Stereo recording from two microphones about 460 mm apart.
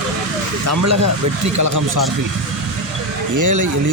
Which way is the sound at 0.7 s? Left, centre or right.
Right.